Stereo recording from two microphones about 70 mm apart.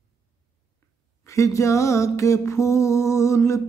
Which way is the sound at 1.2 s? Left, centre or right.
Left.